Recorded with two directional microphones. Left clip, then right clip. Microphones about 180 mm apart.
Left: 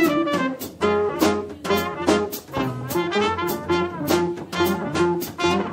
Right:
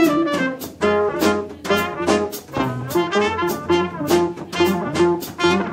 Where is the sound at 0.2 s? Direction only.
15° left (ahead or behind).